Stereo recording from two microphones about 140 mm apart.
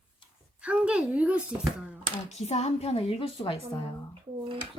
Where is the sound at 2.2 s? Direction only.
50° left (ahead or behind).